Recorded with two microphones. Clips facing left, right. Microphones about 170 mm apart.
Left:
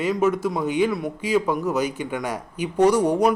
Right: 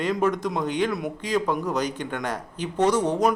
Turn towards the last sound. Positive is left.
turn(degrees=10)  # may be behind; listen again after turning